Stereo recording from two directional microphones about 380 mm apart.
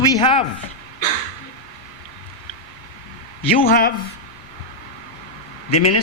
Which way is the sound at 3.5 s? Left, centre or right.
Left.